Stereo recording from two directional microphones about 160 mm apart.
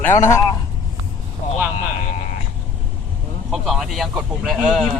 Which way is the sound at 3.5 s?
Centre (ahead or behind).